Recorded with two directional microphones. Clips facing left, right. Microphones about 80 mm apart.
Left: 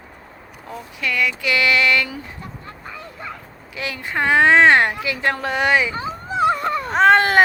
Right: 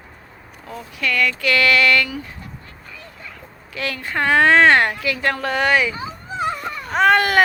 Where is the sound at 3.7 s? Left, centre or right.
Centre.